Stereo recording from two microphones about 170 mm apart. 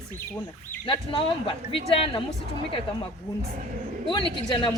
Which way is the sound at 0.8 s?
30° left (ahead or behind).